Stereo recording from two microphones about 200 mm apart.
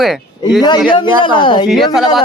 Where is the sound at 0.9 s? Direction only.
25° left (ahead or behind).